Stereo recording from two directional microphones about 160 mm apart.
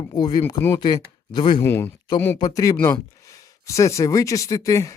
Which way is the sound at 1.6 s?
15° left (ahead or behind).